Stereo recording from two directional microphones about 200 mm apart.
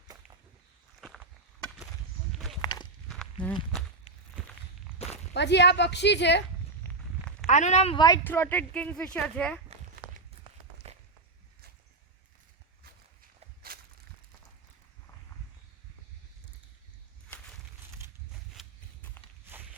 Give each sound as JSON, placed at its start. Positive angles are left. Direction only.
{"t": 2.6, "sound": "walk", "side_deg": 20}
{"t": 4.9, "sound": "walk", "side_deg": 30}
{"t": 5.3, "sound": "speech", "side_deg": 60}
{"t": 6.8, "sound": "a sound", "side_deg": 5}
{"t": 7.4, "sound": "speech", "side_deg": 35}
{"t": 8.0, "sound": "a woman's voice", "side_deg": 15}
{"t": 9.6, "sound": "walk", "side_deg": -40}
{"t": 18.6, "sound": "a sound", "side_deg": 0}
{"t": 19.5, "sound": "walk", "side_deg": -10}